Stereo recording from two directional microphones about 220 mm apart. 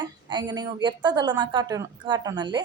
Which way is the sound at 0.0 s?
20° right (ahead or behind).